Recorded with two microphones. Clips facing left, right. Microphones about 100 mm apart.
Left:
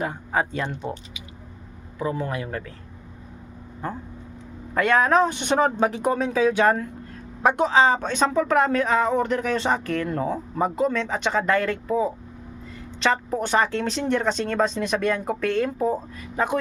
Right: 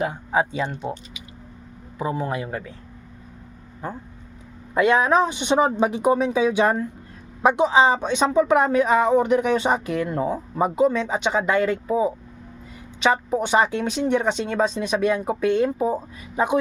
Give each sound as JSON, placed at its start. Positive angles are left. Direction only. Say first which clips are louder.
{"t": 0.0, "sound": "speech", "louder": "right 3 dB", "side_deg": -5}
{"t": 2.0, "sound": "speech", "louder": "right 1 dB", "side_deg": -20}
{"t": 4.7, "sound": "speech", "louder": "right 1 dB", "side_deg": -10}